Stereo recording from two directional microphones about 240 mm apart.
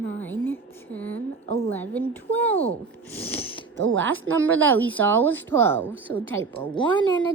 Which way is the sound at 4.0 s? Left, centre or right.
Right.